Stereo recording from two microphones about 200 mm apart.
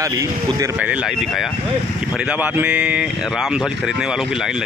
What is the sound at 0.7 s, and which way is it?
Speech, 5° right (ahead or behind).